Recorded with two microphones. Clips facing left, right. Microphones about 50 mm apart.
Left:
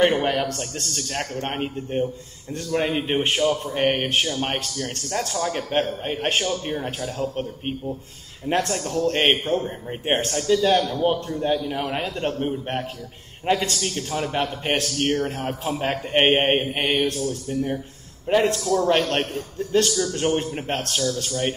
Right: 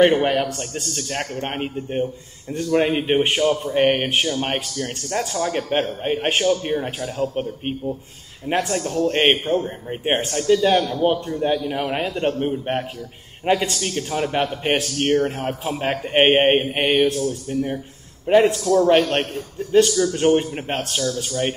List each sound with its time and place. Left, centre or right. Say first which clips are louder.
0.0 s a man's voice: right 4 dB; centre
8.5 s a man's voice: right 1 dB; centre
10.2 s a man's voice: right 3 dB; centre